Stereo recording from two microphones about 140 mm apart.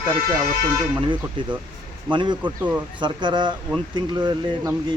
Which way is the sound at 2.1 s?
35° right (ahead or behind).